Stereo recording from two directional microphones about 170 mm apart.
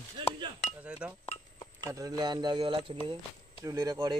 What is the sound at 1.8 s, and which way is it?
Speech, 20° right (ahead or behind).